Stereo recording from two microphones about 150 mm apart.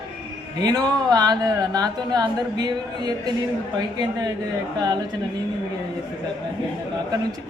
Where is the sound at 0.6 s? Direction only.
25° right (ahead or behind).